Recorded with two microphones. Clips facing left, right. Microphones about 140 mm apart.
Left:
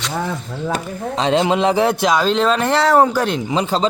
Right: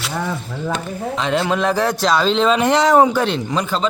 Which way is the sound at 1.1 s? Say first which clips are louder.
Left 4 dB; 30° left (ahead or behind).